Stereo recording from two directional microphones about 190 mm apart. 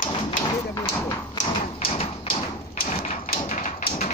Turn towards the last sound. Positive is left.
turn(degrees=45)  # may be behind; listen again after turning